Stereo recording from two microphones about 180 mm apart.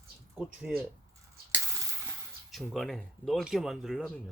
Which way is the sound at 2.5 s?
Centre (ahead or behind).